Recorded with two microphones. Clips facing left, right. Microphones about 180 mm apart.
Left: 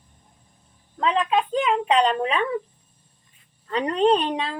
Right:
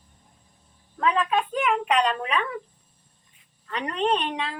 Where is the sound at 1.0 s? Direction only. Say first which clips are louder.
Left 2 dB; 25° left (ahead or behind).